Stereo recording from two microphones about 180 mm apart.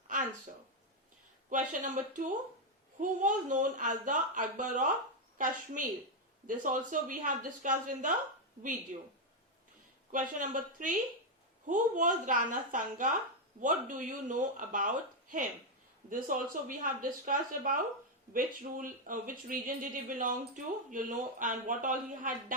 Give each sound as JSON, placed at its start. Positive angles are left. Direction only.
{"t": 1.5, "sound": "speech", "side_deg": -45}
{"t": 10.1, "sound": "speech", "side_deg": -45}